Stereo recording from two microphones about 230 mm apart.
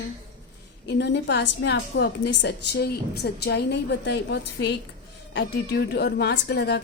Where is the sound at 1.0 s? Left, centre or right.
Left.